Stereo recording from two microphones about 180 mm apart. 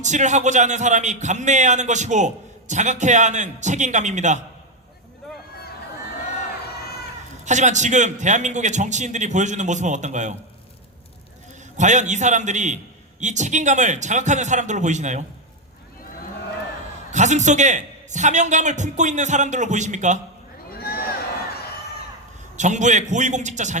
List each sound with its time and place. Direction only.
0.0 s a man's voice: 40° right (ahead or behind)
7.4 s a man's voice: 40° right (ahead or behind)
11.8 s a man's voice: 40° right (ahead or behind)
17.1 s a man's voice: 40° right (ahead or behind)
20.7 s a sound: 60° left (ahead or behind)
22.5 s a man's voice: 40° right (ahead or behind)